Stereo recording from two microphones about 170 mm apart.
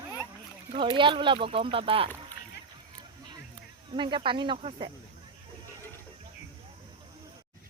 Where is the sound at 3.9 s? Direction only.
30° right (ahead or behind).